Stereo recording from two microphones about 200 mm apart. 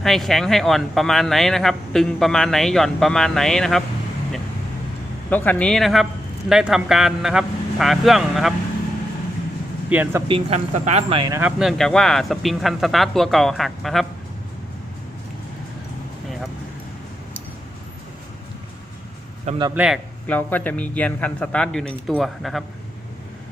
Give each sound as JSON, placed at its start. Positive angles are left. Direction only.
{"t": 0.0, "sound": "speech", "side_deg": 0}
{"t": 5.3, "sound": "speech", "side_deg": 10}
{"t": 9.9, "sound": "speech", "side_deg": -10}
{"t": 10.2, "sound": "speech", "side_deg": -30}
{"t": 11.3, "sound": "speech", "side_deg": -10}
{"t": 11.8, "sound": "speech", "side_deg": 5}
{"t": 19.7, "sound": "speech", "side_deg": -5}
{"t": 20.2, "sound": "speech", "side_deg": 10}